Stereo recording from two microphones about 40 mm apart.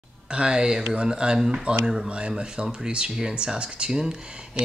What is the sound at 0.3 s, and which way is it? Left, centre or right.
Speech, right.